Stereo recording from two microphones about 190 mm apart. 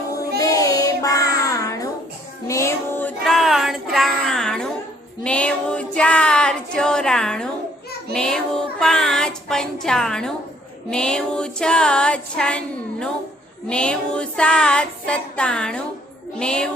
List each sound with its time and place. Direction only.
0.4 s child singing: 20° left (ahead or behind)
5.2 s female singing: 5° left (ahead or behind)